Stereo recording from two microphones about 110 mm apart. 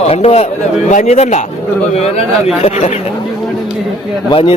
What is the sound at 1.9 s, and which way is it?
Speech, 70° left (ahead or behind).